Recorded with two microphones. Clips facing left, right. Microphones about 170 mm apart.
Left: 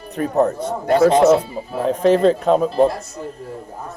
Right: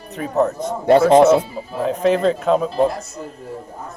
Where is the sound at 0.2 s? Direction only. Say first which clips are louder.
Left 1 dB; 35° left (ahead or behind).